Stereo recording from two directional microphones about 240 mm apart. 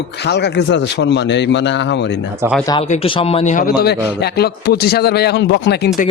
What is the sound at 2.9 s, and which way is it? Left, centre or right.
Speech, left.